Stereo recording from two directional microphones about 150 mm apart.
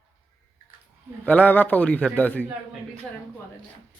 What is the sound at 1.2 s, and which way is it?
Speech, 10° left (ahead or behind).